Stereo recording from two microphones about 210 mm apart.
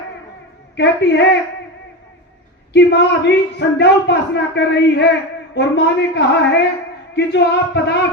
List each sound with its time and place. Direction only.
0.8 s speech: 55° left (ahead or behind)
2.7 s speech: 55° left (ahead or behind)